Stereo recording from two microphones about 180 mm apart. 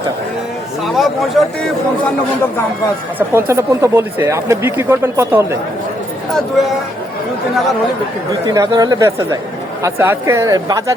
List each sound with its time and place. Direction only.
0.9 s speech: centre (ahead or behind)
3.5 s speech: 15° right (ahead or behind)
6.3 s speech: centre (ahead or behind)
8.4 s speech: 20° right (ahead or behind)